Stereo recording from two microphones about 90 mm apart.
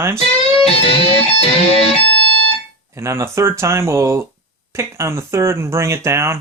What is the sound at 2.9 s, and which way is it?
Speech, 30° right (ahead or behind).